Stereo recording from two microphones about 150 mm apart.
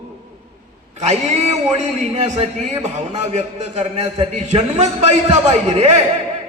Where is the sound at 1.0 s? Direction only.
45° right (ahead or behind).